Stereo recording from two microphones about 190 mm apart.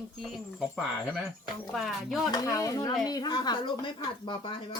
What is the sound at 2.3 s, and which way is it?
Speech, 20° left (ahead or behind).